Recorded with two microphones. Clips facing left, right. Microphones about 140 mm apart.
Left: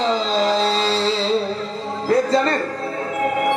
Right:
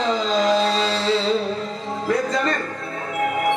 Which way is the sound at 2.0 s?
30° left (ahead or behind).